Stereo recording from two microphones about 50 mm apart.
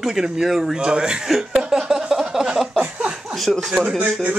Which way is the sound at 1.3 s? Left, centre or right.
Centre.